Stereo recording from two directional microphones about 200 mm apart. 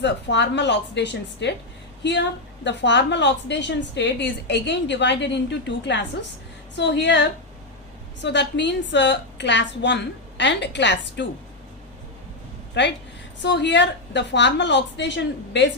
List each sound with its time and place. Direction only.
0.0 s a woman's voice: 60° left (ahead or behind)
2.6 s a woman's voice: 60° left (ahead or behind)
12.8 s a woman's voice: 60° left (ahead or behind)